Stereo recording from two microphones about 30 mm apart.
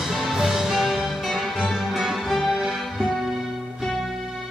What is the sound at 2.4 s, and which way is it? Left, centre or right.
Music, right.